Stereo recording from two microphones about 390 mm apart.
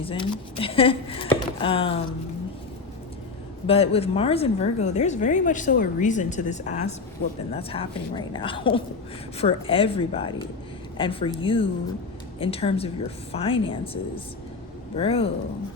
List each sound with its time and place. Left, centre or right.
0.0 s a woman's voice: centre
3.7 s a woman's voice: centre